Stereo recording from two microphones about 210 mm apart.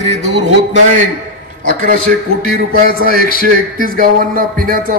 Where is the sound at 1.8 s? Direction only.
40° right (ahead or behind).